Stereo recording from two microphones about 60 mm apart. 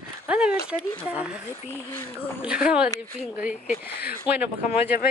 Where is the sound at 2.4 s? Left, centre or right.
Centre.